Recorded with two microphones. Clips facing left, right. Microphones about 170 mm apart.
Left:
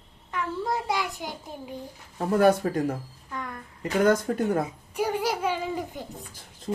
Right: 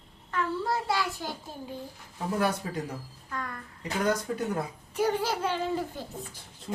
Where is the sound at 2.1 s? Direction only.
55° left (ahead or behind).